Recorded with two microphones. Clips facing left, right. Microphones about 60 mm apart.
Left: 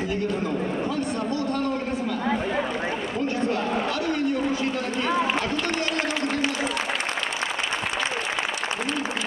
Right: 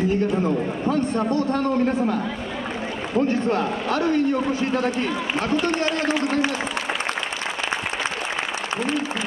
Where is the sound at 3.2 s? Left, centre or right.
Right.